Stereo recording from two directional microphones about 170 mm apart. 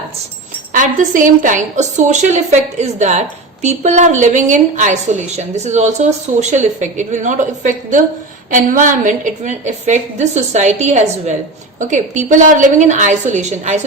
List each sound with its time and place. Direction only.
0.7 s a woman's voice: 50° right (ahead or behind)